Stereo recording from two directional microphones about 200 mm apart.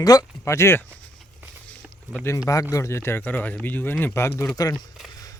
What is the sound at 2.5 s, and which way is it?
A man's voice, 15° left (ahead or behind).